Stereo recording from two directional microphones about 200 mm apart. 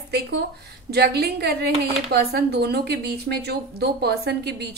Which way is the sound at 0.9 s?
50° right (ahead or behind).